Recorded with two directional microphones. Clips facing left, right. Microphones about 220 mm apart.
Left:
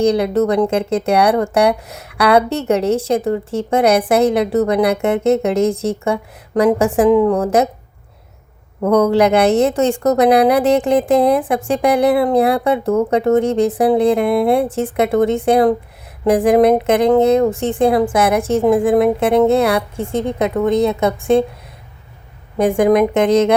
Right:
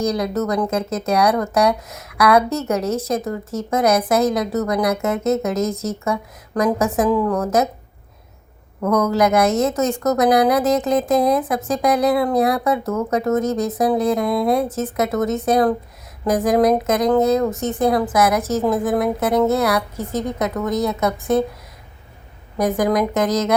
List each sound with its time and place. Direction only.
0.0 s a woman's voice: 30° left (ahead or behind)
8.8 s a woman's voice: 30° left (ahead or behind)
22.5 s a woman's voice: 30° left (ahead or behind)